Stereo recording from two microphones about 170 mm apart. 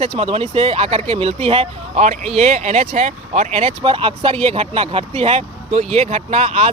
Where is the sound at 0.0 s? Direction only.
35° right (ahead or behind).